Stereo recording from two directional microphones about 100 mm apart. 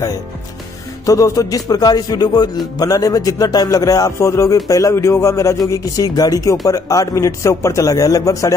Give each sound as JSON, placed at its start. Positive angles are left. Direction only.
{"t": 1.0, "sound": "music", "side_deg": 35}